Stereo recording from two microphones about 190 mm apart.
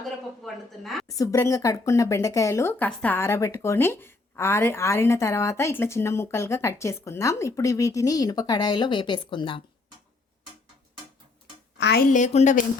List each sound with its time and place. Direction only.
0.0 s a woman's voice: centre (ahead or behind)
1.2 s speech: 15° left (ahead or behind)
11.8 s speech: 60° left (ahead or behind)
12.1 s speech: 40° left (ahead or behind)